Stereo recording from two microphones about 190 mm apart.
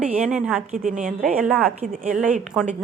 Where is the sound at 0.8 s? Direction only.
40° right (ahead or behind).